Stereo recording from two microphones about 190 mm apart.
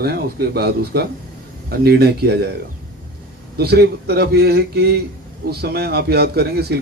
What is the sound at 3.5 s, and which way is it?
Speech, 60° right (ahead or behind).